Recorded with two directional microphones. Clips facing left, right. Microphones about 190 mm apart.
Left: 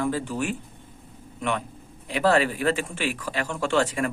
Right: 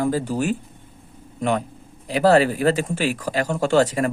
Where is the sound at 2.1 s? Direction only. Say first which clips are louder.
Right 5 dB; 40° right (ahead or behind).